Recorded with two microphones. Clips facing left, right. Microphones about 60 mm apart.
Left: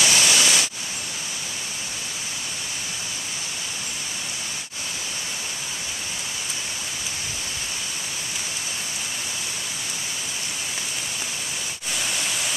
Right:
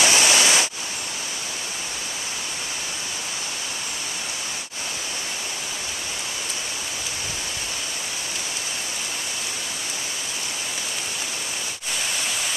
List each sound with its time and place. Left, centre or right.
0.0 s waterfall: right